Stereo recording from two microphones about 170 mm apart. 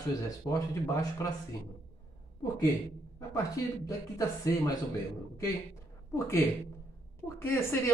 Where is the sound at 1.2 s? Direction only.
20° left (ahead or behind).